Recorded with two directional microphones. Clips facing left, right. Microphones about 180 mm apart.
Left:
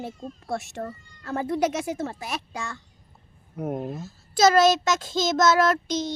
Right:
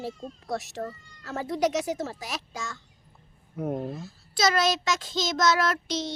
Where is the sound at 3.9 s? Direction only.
45° left (ahead or behind).